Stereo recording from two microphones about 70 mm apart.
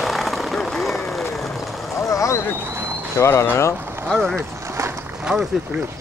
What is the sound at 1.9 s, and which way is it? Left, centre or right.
Vehicle, left.